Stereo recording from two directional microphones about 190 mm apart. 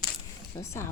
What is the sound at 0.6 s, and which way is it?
Speech, 15° left (ahead or behind).